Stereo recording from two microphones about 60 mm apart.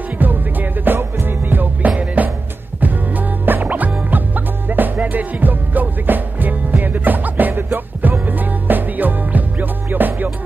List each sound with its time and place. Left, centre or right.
0.2 s music: right